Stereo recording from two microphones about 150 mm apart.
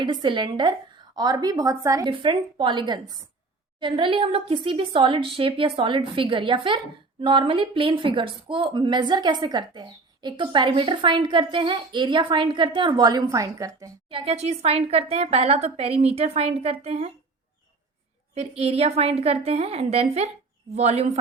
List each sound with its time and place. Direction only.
0.0 s a woman's voice: 30° right (ahead or behind)
2.0 s speech: 35° right (ahead or behind)
14.1 s a woman's voice: 40° right (ahead or behind)
18.3 s a woman's voice: 45° right (ahead or behind)